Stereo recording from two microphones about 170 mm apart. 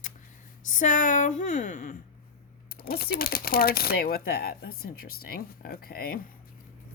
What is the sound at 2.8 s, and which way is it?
Speech, 65° left (ahead or behind).